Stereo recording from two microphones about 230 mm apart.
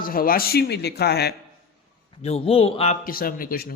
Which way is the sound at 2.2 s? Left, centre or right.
Left.